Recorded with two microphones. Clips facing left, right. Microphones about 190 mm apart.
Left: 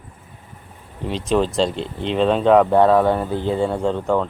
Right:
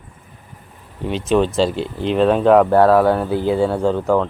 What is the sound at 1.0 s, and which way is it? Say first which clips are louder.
Speech: right 3 dB; centre (ahead or behind).